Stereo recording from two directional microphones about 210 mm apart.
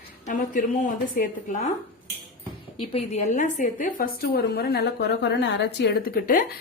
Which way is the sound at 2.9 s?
35° left (ahead or behind).